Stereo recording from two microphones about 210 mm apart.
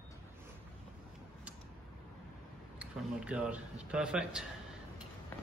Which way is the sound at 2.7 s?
5° right (ahead or behind).